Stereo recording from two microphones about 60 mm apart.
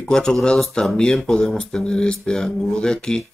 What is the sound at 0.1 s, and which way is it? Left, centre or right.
Speech, centre.